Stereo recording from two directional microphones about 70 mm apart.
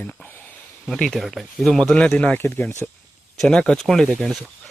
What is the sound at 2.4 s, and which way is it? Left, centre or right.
Speech, left.